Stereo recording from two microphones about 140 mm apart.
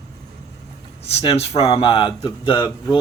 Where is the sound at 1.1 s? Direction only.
45° left (ahead or behind).